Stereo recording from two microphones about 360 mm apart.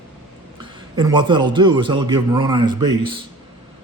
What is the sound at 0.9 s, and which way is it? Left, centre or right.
A man's voice, centre.